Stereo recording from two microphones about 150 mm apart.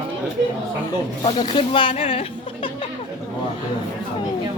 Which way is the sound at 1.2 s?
35° left (ahead or behind).